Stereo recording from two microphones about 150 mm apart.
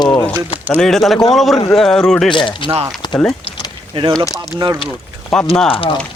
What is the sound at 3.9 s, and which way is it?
Speech, 30° right (ahead or behind).